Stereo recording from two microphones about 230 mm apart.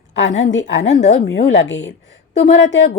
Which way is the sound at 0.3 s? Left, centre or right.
Left.